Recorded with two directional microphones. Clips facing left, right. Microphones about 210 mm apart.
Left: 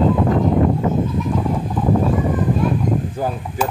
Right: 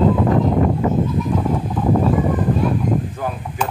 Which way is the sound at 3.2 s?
35° left (ahead or behind).